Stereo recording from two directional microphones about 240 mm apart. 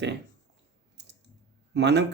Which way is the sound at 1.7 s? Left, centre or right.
Right.